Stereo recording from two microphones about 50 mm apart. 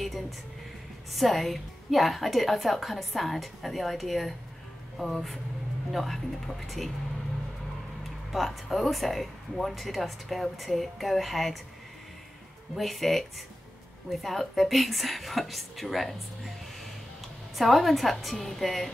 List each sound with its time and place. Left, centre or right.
1.1 s a woman's voice: centre
8.3 s a woman's voice: centre
12.7 s a woman's voice: centre
17.6 s a woman's voice: centre